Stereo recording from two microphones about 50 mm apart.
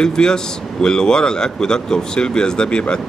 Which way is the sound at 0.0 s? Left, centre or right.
Centre.